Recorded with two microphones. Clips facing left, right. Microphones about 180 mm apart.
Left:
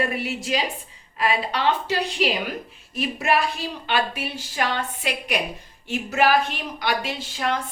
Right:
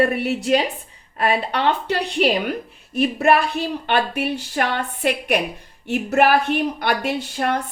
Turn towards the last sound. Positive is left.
turn(degrees=-55)  # may be behind; listen again after turning